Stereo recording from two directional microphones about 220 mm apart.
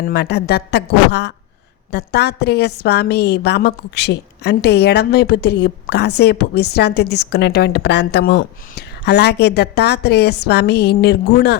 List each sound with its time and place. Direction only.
0.0 s a woman's voice: 50° left (ahead or behind)